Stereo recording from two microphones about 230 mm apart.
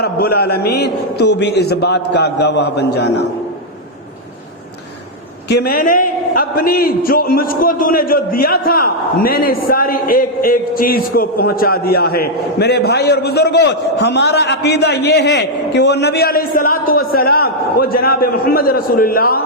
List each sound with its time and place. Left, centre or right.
0.0 s a man's voice: left
5.5 s a man's voice: left